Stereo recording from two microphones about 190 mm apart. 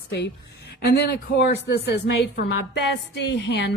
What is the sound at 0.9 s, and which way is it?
A woman's voice, 60° left (ahead or behind).